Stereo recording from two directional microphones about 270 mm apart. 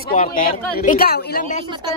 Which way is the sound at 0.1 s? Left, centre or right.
Left.